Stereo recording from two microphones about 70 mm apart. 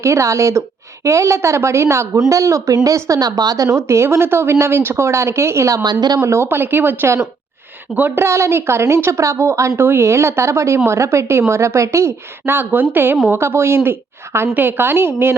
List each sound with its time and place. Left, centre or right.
0.0 s a woman's voice: right
5.8 s a woman's voice: right
6.2 s a woman's voice: right
8.2 s a woman's voice: right
12.5 s a woman's voice: right